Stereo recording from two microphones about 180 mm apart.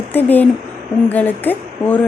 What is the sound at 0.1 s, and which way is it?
Speech, 10° left (ahead or behind).